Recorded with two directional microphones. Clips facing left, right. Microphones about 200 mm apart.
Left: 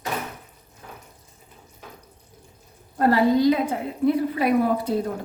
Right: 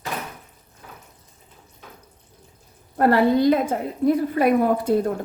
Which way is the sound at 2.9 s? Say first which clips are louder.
Right 1 dB; 60° right (ahead or behind).